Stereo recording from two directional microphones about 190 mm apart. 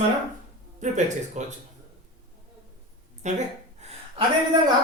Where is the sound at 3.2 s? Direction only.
35° right (ahead or behind).